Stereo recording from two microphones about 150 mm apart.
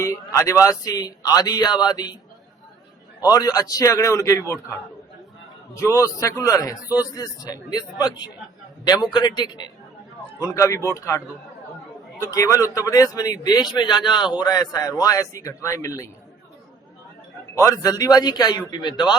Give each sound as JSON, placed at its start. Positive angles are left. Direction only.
{"t": 0.0, "sound": "a man's voice", "side_deg": 20}
{"t": 3.2, "sound": "a man's voice", "side_deg": 25}
{"t": 5.8, "sound": "a man's voice", "side_deg": 20}
{"t": 12.2, "sound": "a man's voice", "side_deg": 20}
{"t": 17.5, "sound": "a man's voice", "side_deg": 20}